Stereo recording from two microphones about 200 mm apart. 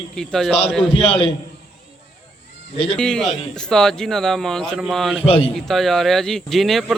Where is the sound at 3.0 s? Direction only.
5° left (ahead or behind).